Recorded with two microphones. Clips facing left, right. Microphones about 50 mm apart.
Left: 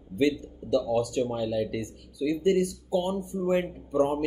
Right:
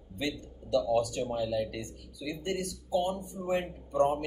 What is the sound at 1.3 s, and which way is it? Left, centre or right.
Speech, left.